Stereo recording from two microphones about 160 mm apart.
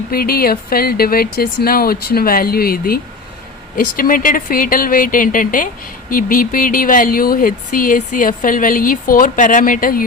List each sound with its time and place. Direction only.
0.1 s speech: 70° left (ahead or behind)